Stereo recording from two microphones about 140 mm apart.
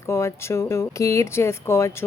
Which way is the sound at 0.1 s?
20° left (ahead or behind).